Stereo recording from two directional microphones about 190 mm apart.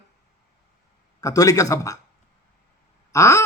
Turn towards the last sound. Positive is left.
turn(degrees=15)  # may be behind; listen again after turning